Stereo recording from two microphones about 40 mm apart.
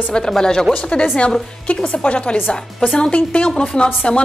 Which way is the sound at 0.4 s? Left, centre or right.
Centre.